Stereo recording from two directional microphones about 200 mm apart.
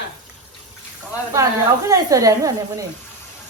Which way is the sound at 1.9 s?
15° right (ahead or behind).